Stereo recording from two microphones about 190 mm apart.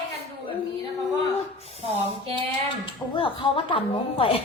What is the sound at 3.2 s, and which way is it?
Child singing, 25° left (ahead or behind).